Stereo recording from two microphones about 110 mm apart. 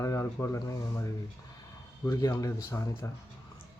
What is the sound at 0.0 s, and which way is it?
Speech, 25° left (ahead or behind).